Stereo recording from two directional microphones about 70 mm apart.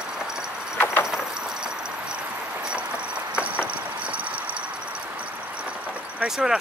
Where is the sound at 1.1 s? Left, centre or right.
Centre.